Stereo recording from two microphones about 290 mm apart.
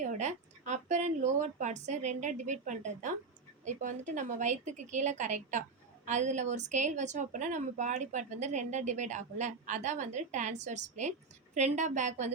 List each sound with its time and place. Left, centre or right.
0.0 s a woman's voice: right